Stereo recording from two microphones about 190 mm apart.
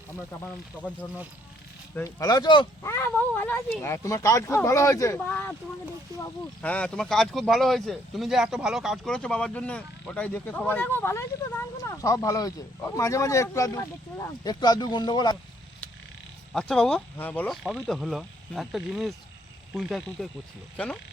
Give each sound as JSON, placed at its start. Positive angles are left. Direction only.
{"t": 0.4, "sound": "speech", "side_deg": 5}
{"t": 2.0, "sound": "speech", "side_deg": 15}
{"t": 2.8, "sound": "speech", "side_deg": 15}
{"t": 16.5, "sound": "speech", "side_deg": 5}